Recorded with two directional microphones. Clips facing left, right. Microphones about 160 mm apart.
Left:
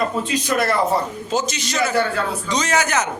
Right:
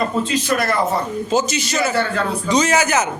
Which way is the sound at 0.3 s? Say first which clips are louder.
Right 1 dB; 20° left (ahead or behind).